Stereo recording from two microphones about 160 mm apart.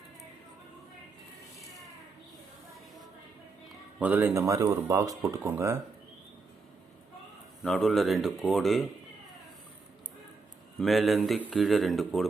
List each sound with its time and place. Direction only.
4.0 s speech: 10° right (ahead or behind)
7.6 s speech: centre (ahead or behind)
10.8 s speech: centre (ahead or behind)